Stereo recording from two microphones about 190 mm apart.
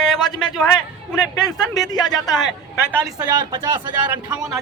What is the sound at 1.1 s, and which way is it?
Speech, 5° left (ahead or behind).